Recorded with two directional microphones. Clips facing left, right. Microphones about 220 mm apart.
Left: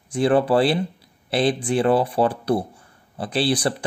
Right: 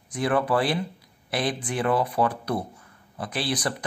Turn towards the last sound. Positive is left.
turn(degrees=30)  # may be behind; listen again after turning